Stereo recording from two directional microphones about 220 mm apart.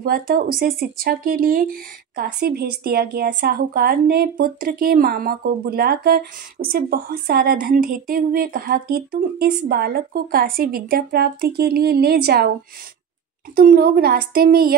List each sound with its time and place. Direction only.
0.0 s speech: 40° right (ahead or behind)
13.6 s speech: 45° right (ahead or behind)